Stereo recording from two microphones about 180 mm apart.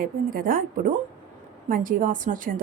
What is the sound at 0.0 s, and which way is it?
A woman's voice, 50° right (ahead or behind).